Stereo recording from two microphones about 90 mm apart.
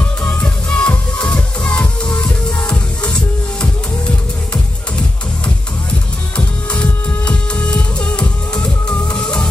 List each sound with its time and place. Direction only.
0.2 s music: 15° left (ahead or behind)
6.3 s music: 15° left (ahead or behind)